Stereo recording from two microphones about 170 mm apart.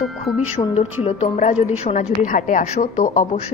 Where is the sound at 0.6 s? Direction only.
30° left (ahead or behind).